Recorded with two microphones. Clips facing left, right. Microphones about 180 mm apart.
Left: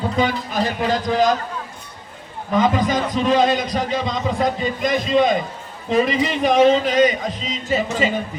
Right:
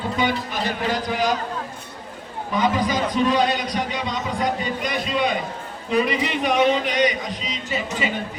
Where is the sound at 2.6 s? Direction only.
45° left (ahead or behind).